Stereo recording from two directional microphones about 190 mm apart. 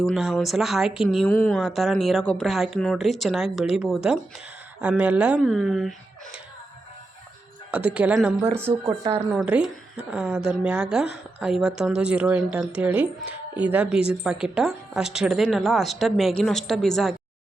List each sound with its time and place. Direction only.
0.0 s a woman's voice: centre (ahead or behind)
7.7 s a woman's voice: 5° right (ahead or behind)
8.9 s speech: 30° right (ahead or behind)
9.3 s a woman's voice: 5° right (ahead or behind)